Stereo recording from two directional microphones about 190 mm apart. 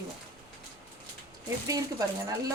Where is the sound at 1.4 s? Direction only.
15° right (ahead or behind).